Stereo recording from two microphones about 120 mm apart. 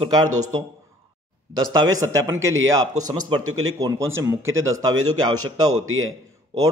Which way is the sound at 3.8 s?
25° right (ahead or behind).